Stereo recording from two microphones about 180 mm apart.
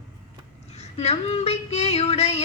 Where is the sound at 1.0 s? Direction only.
35° left (ahead or behind).